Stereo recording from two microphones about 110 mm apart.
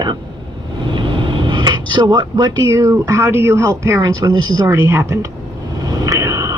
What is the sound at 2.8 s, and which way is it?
Speech, 30° right (ahead or behind).